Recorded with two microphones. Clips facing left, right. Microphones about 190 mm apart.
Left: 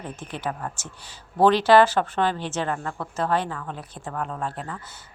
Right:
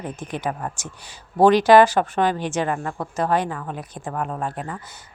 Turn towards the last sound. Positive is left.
turn(degrees=-15)  # may be behind; listen again after turning